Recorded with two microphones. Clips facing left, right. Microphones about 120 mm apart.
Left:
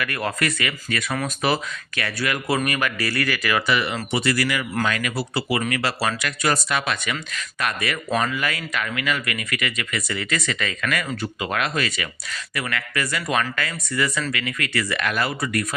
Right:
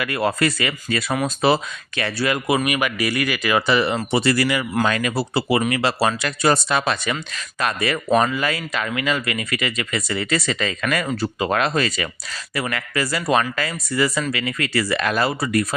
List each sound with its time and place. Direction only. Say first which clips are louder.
0.0 s speech: right 5 dB; 25° right (ahead or behind)
2.6 s speech: right 3 dB; 15° right (ahead or behind); by 15.6 s 30° right (ahead or behind)